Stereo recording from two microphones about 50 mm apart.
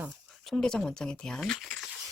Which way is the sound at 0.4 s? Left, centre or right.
Centre.